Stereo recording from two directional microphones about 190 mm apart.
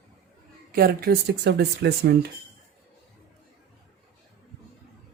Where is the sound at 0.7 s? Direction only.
55° right (ahead or behind).